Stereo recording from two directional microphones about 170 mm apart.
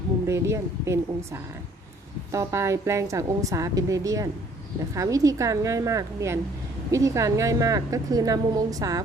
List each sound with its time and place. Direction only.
0.3 s a woman's voice: 15° right (ahead or behind)